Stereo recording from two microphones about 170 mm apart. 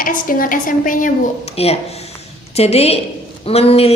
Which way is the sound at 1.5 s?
35° left (ahead or behind).